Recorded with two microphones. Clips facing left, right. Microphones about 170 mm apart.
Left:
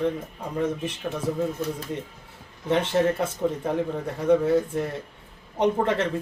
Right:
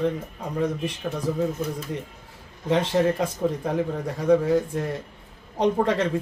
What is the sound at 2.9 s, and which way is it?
Speech, 15° right (ahead or behind).